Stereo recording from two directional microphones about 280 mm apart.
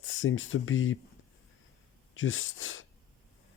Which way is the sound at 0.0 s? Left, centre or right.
Left.